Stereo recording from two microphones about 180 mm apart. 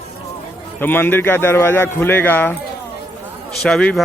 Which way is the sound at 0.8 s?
10° left (ahead or behind).